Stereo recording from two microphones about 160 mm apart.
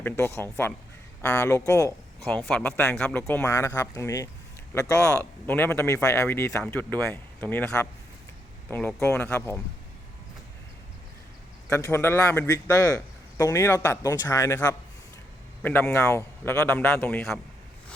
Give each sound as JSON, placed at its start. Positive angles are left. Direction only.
{"t": 0.0, "sound": "a man's voice", "side_deg": 15}
{"t": 2.4, "sound": "a man's voice", "side_deg": 5}
{"t": 9.0, "sound": "a man's voice", "side_deg": 15}
{"t": 9.2, "sound": "a man's voice", "side_deg": 5}
{"t": 11.7, "sound": "a man's voice", "side_deg": 15}